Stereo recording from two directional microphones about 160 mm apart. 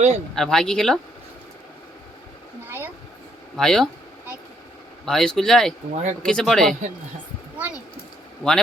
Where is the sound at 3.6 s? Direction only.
Centre (ahead or behind).